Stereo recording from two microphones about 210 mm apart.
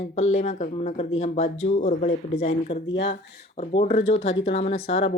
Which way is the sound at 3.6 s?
30° left (ahead or behind).